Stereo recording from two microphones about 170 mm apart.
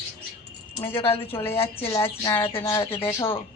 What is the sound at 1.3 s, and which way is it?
Speech, 15° left (ahead or behind).